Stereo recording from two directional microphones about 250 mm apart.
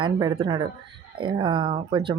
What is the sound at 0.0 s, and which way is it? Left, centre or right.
Speech, centre.